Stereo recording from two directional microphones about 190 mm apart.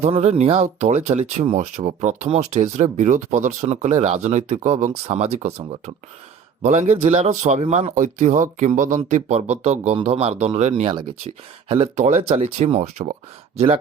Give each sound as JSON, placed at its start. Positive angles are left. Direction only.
{"t": 0.0, "sound": "speech", "side_deg": -35}